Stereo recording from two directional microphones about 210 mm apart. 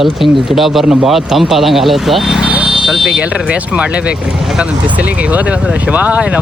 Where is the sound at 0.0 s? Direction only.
Centre (ahead or behind).